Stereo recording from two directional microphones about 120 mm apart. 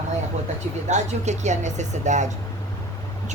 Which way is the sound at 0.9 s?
75° right (ahead or behind).